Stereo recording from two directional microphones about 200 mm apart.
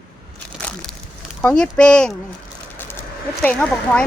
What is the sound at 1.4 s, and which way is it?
Speech, 5° left (ahead or behind).